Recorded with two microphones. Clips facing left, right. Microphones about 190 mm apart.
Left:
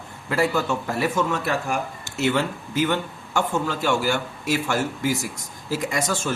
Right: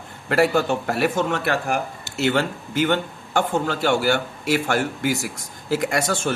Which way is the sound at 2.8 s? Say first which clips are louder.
Right 2 dB; 60° right (ahead or behind).